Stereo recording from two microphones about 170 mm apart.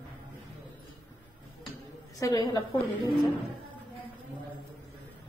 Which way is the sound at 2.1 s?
20° left (ahead or behind).